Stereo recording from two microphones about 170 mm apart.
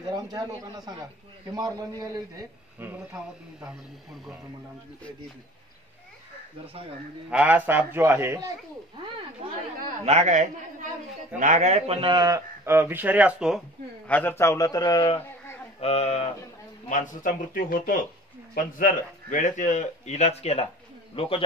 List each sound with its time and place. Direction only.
0.1 s a man's voice: 25° right (ahead or behind)
7.2 s a man's voice: 10° right (ahead or behind)
10.0 s a man's voice: 45° right (ahead or behind); by 13.6 s 5° right (ahead or behind)
14.0 s a man's voice: 10° left (ahead or behind); by 16.3 s 40° left (ahead or behind)
16.9 s speech: 50° left (ahead or behind); by 21.5 s 30° left (ahead or behind)